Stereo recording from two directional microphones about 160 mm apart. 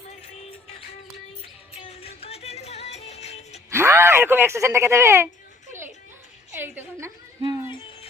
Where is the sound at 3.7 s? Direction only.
15° right (ahead or behind).